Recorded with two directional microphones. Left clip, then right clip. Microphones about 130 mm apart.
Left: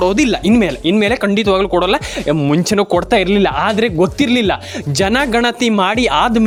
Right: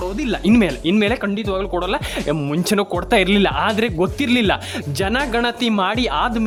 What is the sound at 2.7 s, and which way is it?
Speech, 15° left (ahead or behind).